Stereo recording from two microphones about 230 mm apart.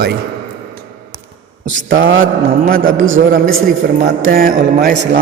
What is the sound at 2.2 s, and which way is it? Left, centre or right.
Speech, right.